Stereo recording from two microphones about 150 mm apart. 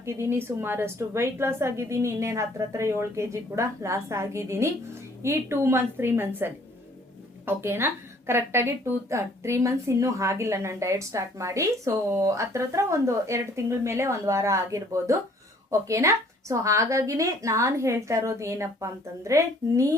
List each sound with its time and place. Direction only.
0.0 s a woman's voice: 15° right (ahead or behind)